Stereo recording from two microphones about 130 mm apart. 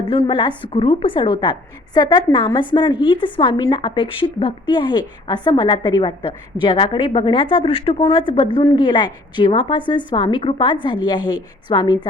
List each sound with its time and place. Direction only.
0.0 s a woman's voice: 40° left (ahead or behind)